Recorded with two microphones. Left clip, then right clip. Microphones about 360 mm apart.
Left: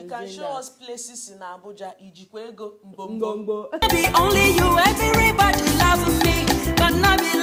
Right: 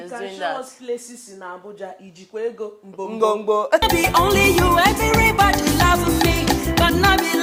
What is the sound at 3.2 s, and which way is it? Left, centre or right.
Speech, right.